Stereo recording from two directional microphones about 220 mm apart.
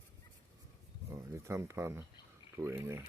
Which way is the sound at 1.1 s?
15° right (ahead or behind).